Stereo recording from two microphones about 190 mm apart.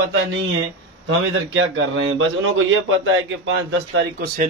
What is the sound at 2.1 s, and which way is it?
A man's voice, 90° right.